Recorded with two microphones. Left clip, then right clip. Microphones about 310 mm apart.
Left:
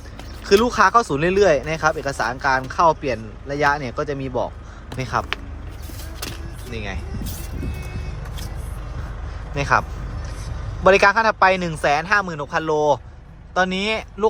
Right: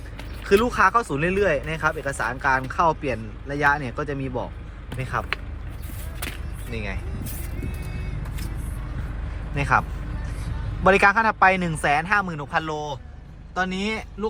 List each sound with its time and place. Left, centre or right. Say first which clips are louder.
0.4 s speech: left 3 dB; centre
9.6 s speech: left 2 dB; centre
10.8 s speech: left 3 dB; centre